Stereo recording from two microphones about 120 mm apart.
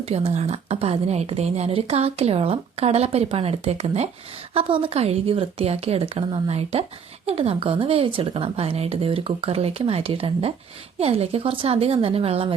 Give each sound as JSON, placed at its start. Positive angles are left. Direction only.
{"t": 0.0, "sound": "a woman's voice", "side_deg": -60}
{"t": 4.5, "sound": "a woman's voice", "side_deg": -50}